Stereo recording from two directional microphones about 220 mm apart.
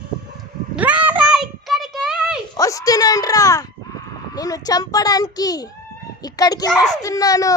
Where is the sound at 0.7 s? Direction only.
5° right (ahead or behind).